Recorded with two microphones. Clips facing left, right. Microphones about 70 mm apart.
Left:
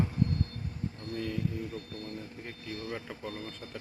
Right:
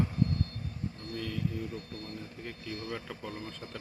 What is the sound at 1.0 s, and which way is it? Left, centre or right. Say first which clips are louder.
Speech: left 4 dB; left.